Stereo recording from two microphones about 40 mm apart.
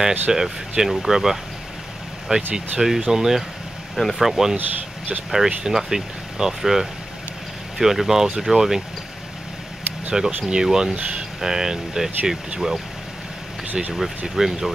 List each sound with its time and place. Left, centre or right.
0.3 s speech: centre
3.9 s speech: centre
4.2 s speech: centre
4.6 s speech: right
5.3 s speech: centre
10.1 s speech: centre
13.9 s speech: centre